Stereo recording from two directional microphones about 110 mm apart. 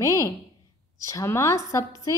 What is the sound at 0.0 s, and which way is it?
A woman's voice, 30° left (ahead or behind).